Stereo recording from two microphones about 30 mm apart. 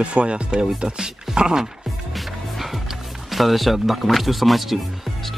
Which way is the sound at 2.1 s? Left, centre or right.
Centre.